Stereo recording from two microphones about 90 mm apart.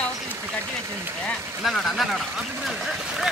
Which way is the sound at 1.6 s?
Centre (ahead or behind).